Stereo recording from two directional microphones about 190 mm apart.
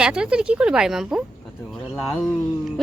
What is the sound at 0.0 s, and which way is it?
Speech, 5° right (ahead or behind).